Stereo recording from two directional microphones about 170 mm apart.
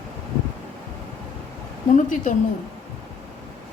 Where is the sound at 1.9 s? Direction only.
50° left (ahead or behind).